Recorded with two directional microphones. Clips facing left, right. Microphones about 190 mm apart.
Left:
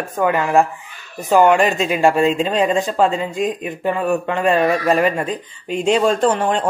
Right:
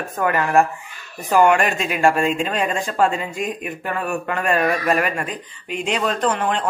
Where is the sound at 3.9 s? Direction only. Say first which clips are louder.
Left 4 dB; 20° left (ahead or behind).